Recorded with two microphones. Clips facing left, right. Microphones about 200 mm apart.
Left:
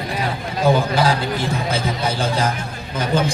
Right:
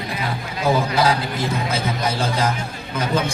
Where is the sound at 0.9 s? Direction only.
30° left (ahead or behind).